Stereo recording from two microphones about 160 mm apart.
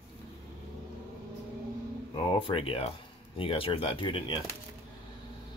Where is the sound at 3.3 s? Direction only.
35° left (ahead or behind).